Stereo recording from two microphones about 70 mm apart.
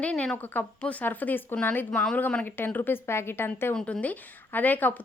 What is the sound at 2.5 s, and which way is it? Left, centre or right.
Speech, left.